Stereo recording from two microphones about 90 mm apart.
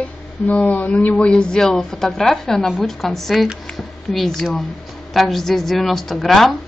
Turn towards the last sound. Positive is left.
turn(degrees=0)  # may be behind; listen again after turning